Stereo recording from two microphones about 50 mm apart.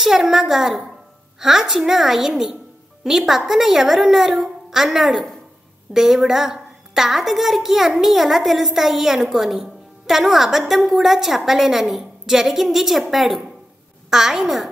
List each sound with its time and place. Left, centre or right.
0.0 s a woman's voice: centre